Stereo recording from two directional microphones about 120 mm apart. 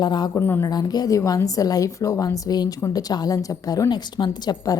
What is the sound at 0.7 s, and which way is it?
A woman's voice, 35° left (ahead or behind).